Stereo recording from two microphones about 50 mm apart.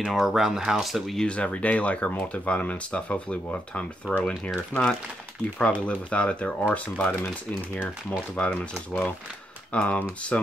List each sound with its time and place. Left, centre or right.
0.0 s speech: centre
1.2 s speech: left
4.7 s speech: right
5.6 s speech: left
8.4 s speech: left